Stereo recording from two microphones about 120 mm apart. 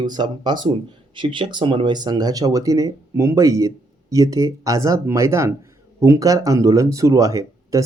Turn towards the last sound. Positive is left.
turn(degrees=-25)  # may be behind; listen again after turning